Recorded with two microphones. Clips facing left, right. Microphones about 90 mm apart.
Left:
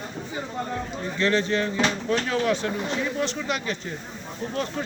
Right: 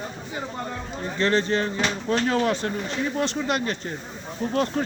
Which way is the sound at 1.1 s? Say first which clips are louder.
Right 1 dB; 35° right (ahead or behind).